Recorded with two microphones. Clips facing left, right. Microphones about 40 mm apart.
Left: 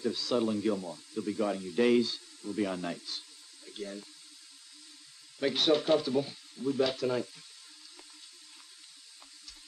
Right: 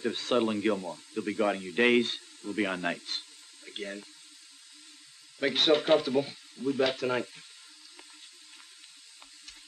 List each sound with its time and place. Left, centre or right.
0.0 s speech: right
5.4 s speech: right